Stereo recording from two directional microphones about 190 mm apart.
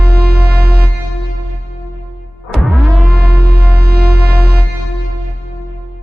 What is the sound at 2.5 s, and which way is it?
Music, centre (ahead or behind).